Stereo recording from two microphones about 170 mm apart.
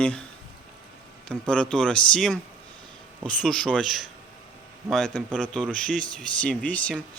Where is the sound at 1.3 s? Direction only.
5° left (ahead or behind).